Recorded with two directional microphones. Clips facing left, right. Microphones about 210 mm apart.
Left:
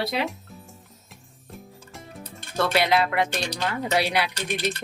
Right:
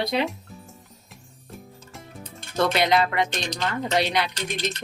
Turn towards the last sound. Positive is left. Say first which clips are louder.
# left 1 dB
turn(degrees=10)  # may be behind; listen again after turning